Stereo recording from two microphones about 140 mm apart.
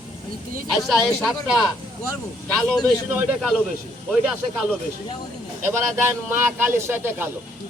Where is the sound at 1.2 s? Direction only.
Centre (ahead or behind).